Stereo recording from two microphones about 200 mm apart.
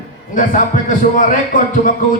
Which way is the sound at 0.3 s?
40° left (ahead or behind).